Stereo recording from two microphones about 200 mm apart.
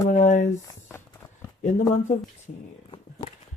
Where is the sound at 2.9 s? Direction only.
25° left (ahead or behind).